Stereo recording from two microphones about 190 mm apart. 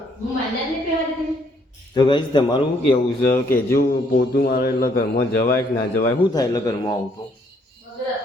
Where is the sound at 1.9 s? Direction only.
25° left (ahead or behind).